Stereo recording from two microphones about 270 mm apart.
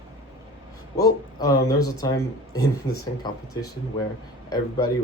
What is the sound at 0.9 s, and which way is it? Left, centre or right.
Speech, centre.